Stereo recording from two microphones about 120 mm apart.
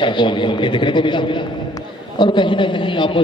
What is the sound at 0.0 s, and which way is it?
A man's voice, 40° left (ahead or behind).